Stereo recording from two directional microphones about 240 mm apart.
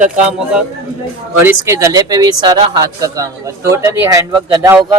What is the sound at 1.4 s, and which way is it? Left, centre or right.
Speech, centre.